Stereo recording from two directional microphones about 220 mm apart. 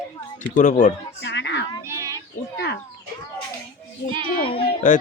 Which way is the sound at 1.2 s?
50° left (ahead or behind).